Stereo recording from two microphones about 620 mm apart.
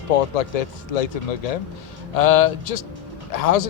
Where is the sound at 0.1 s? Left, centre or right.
Left.